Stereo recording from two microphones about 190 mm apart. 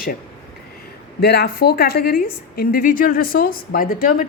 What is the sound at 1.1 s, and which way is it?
A woman's voice, 60° left (ahead or behind).